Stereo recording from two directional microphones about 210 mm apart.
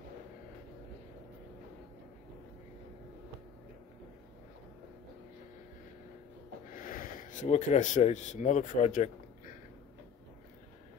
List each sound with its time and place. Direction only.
6.7 s speech: 40° left (ahead or behind)